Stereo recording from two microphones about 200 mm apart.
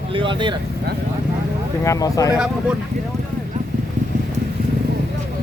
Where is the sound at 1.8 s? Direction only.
15° left (ahead or behind).